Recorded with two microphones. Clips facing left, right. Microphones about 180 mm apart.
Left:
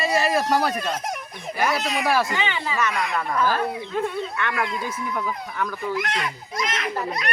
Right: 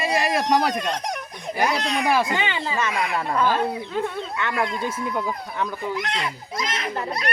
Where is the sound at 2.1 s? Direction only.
20° right (ahead or behind).